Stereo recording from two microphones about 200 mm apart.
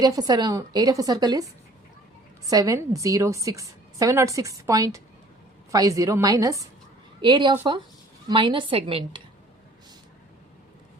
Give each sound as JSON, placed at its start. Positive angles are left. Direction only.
{"t": 0.0, "sound": "a woman's voice", "side_deg": -20}
{"t": 2.5, "sound": "a woman's voice", "side_deg": -15}